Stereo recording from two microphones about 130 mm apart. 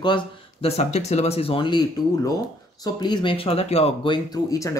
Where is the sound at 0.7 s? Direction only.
55° left (ahead or behind).